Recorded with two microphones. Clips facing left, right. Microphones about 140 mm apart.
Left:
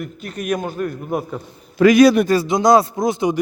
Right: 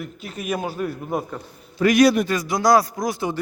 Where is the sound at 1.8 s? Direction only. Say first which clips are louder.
Left 7 dB; 90° left.